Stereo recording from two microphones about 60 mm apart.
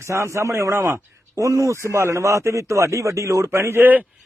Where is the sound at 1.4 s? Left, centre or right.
Right.